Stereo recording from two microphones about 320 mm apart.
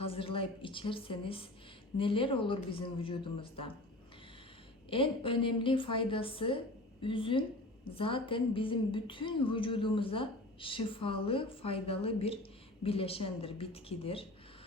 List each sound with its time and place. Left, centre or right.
0.0 s a woman's voice: centre
4.9 s a woman's voice: centre